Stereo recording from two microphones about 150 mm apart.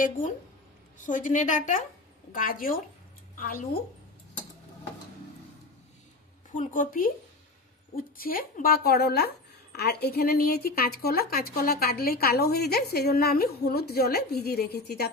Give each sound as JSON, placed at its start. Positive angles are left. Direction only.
{"t": 1.0, "sound": "a woman's voice", "side_deg": 60}
{"t": 6.5, "sound": "a woman's voice", "side_deg": 60}